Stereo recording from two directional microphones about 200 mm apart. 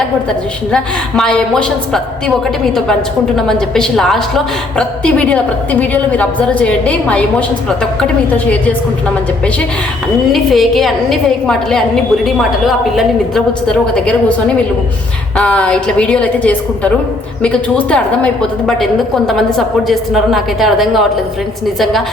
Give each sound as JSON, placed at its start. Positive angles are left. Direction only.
{"t": 0.7, "sound": "a woman's voice", "side_deg": 5}
{"t": 10.3, "sound": "a woman's voice", "side_deg": 0}
{"t": 15.4, "sound": "a woman's voice", "side_deg": 5}